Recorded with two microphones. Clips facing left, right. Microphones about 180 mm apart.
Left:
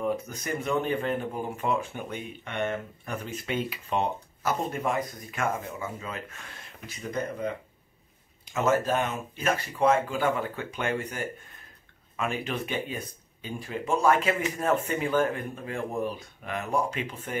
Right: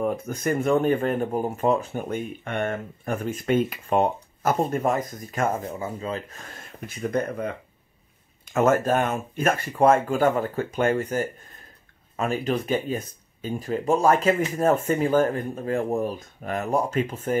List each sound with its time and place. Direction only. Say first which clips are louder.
0.0 s speech: right 5 dB; 50° right (ahead or behind)
8.5 s speech: right 5 dB; 50° right (ahead or behind)